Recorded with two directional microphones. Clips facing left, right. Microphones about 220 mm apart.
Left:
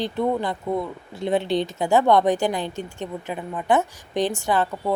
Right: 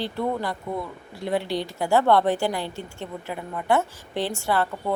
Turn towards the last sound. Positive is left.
turn(degrees=15)  # may be behind; listen again after turning